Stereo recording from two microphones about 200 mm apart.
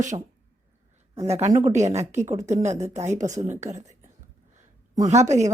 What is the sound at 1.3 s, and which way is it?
A woman's voice, 35° right (ahead or behind).